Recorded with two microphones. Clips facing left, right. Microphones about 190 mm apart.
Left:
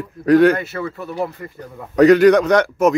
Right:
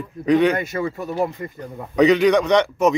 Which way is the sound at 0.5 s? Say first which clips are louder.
Right 1 dB; 15° right (ahead or behind).